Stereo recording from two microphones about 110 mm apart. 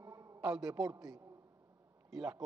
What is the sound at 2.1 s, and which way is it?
Speech, 5° right (ahead or behind).